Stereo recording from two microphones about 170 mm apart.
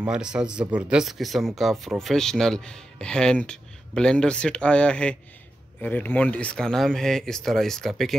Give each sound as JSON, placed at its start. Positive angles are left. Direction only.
{"t": 0.0, "sound": "speech", "side_deg": -5}